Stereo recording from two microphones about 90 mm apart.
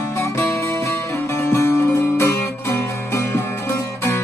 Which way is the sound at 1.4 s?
30° left (ahead or behind).